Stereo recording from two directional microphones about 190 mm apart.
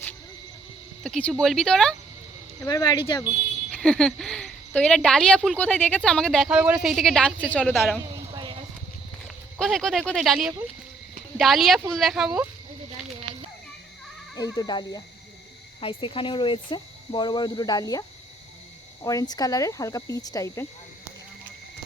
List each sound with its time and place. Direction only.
1.0 s speech: centre (ahead or behind)
2.6 s speech: 20° left (ahead or behind)
3.7 s speech: 5° left (ahead or behind)
8.3 s a sound: 25° right (ahead or behind)
9.2 s speech: centre (ahead or behind)
14.3 s speech: 20° left (ahead or behind)
19.0 s speech: 20° left (ahead or behind)